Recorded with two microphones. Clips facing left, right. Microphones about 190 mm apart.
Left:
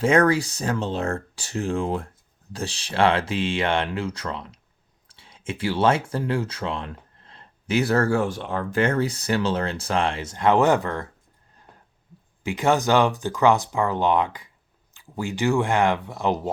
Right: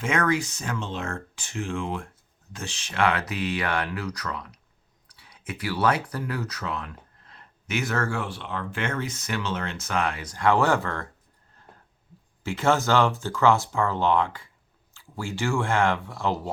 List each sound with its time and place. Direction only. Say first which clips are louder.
0.0 s speech: left 6 dB; 35° left (ahead or behind); by 11.0 s 20° left (ahead or behind)
12.4 s speech: left 2 dB; 15° left (ahead or behind)